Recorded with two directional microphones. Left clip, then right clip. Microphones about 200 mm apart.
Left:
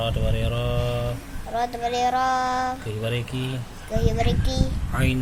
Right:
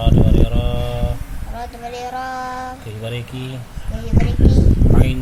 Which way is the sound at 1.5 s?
55° left (ahead or behind).